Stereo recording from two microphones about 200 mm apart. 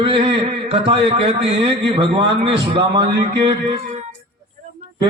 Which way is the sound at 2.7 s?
20° right (ahead or behind).